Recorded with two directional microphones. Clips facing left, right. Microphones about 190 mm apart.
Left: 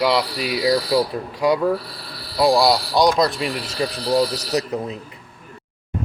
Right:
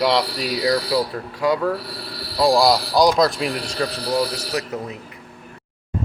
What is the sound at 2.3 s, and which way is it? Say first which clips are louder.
Speech: even; 5° left (ahead or behind).